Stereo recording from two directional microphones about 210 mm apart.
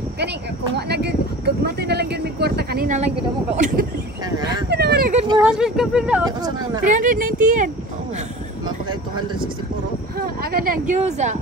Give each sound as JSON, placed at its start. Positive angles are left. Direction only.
{"t": 0.7, "sound": "speech", "side_deg": -50}
{"t": 3.0, "sound": "speech", "side_deg": -35}
{"t": 4.4, "sound": "speech", "side_deg": -20}
{"t": 4.6, "sound": "a sound", "side_deg": -50}
{"t": 5.4, "sound": "speech", "side_deg": -5}
{"t": 6.2, "sound": "speech", "side_deg": -20}
{"t": 6.8, "sound": "speech", "side_deg": -35}
{"t": 10.1, "sound": "speech", "side_deg": -45}